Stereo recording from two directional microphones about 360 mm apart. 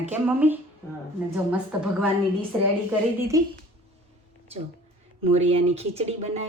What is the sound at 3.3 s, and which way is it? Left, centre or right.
Speech, centre.